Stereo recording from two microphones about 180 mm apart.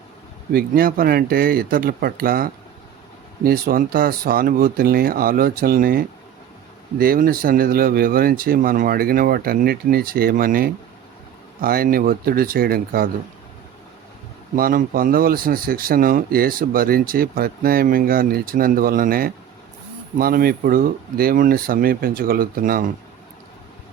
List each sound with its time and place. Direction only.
0.5 s speech: 55° right (ahead or behind)
14.5 s speech: 50° right (ahead or behind)